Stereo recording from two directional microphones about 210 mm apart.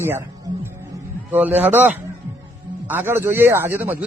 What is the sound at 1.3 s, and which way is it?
Mantra, 10° right (ahead or behind).